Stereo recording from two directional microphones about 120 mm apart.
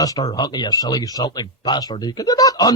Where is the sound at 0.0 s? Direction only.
30° left (ahead or behind).